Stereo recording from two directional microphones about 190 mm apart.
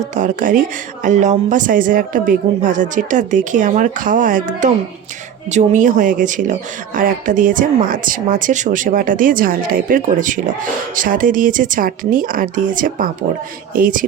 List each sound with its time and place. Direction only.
0.1 s speech: 40° right (ahead or behind)